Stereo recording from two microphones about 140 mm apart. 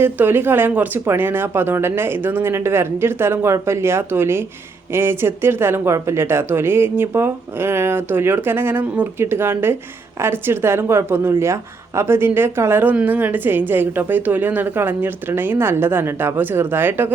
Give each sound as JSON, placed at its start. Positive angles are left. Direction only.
{"t": 0.0, "sound": "a woman's voice", "side_deg": -15}